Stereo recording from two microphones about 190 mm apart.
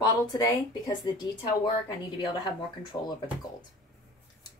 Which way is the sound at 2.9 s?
20° left (ahead or behind).